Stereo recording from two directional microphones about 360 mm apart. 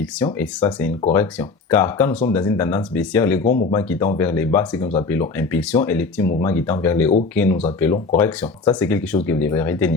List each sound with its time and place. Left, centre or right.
0.3 s speech: centre
3.4 s speech: left
3.7 s speech: centre